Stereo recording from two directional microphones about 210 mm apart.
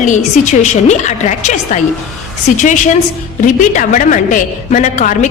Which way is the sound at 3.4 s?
40° left (ahead or behind).